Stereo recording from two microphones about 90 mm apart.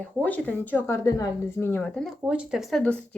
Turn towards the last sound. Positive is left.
turn(degrees=10)  # may be behind; listen again after turning